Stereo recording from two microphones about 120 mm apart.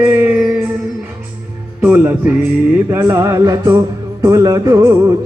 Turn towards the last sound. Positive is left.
turn(degrees=-25)  # may be behind; listen again after turning